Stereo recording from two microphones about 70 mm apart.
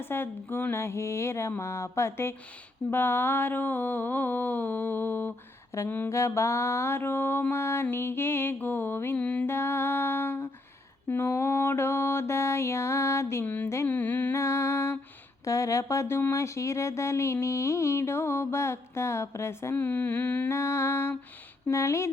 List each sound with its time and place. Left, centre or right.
0.0 s speech: left
2.9 s mantra: left
5.7 s music: left
6.1 s speech: left
9.1 s mantra: centre
9.5 s speech: left
13.4 s mantra: left
14.3 s music: left
15.4 s speech: left
19.7 s mantra: left
20.5 s speech: left
21.7 s music: left